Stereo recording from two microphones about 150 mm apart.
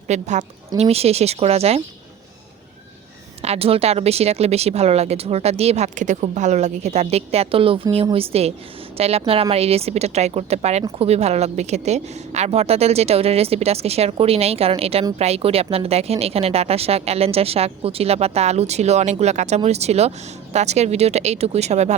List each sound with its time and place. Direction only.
0.1 s speech: 50° right (ahead or behind)
3.4 s a woman's voice: 45° right (ahead or behind)